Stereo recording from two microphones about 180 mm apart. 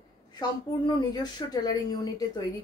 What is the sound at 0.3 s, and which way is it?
Speech, 25° left (ahead or behind).